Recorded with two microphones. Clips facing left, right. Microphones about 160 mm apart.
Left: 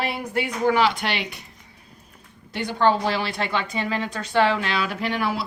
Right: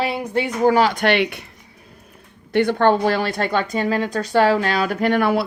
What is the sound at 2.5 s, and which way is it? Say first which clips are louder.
Speech: right 5 dB; 60° right (ahead or behind).